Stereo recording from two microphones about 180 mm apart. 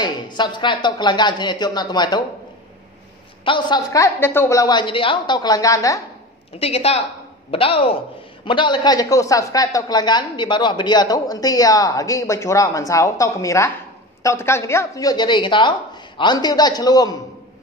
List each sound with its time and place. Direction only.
0.0 s a woman's voice: 25° left (ahead or behind)
3.4 s a woman's voice: 25° left (ahead or behind)
6.6 s a man's voice: 35° left (ahead or behind)